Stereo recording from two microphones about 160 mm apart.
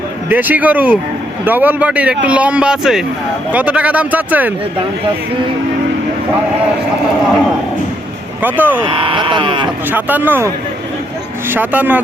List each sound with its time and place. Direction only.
0.3 s speech: 10° right (ahead or behind)
8.4 s speech: 10° right (ahead or behind)
8.8 s speech: 30° right (ahead or behind)
9.9 s speech: 10° right (ahead or behind)